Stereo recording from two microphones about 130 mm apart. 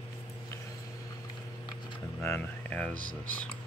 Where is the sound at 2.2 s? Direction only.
15° left (ahead or behind).